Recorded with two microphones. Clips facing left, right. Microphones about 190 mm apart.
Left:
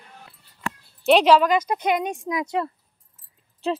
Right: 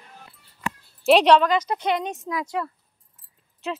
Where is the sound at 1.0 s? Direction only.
Centre (ahead or behind); by 2.7 s 20° left (ahead or behind).